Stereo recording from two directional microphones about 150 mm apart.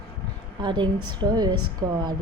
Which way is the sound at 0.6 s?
30° right (ahead or behind).